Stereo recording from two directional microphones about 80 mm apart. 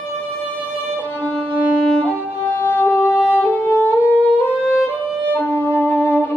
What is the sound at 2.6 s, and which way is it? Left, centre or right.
Music, left.